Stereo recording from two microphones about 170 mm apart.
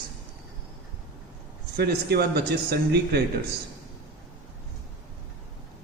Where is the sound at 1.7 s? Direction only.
70° right (ahead or behind).